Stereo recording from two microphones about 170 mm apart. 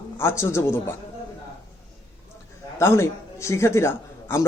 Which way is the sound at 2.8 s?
15° left (ahead or behind).